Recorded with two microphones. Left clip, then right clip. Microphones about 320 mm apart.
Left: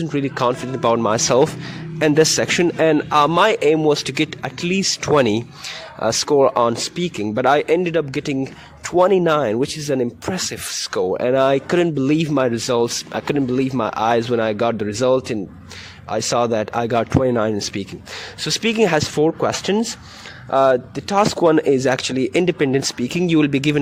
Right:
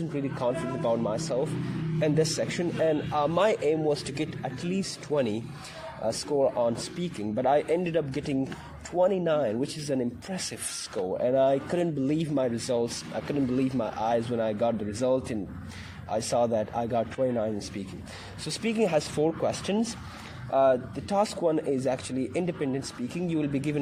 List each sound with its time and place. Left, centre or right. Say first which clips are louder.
0.1 s a man's voice: left 10 dB; left